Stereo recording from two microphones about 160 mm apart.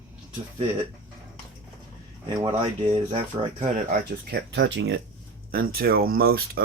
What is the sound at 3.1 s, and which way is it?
Speech, 30° right (ahead or behind).